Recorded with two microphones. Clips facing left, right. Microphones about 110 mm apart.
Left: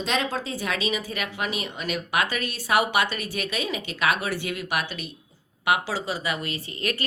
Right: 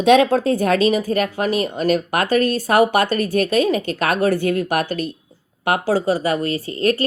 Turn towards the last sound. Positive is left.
turn(degrees=-35)  # may be behind; listen again after turning